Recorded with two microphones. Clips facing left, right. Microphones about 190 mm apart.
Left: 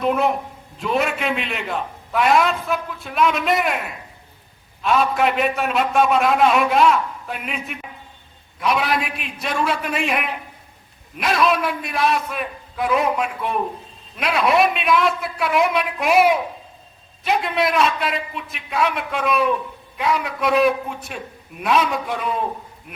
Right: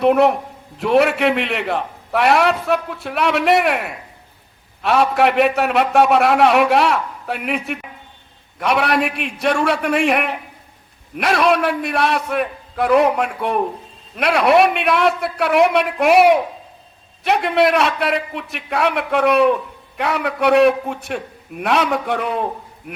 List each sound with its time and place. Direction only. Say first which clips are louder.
0.0 s a man's voice: right 6 dB; 65° right (ahead or behind)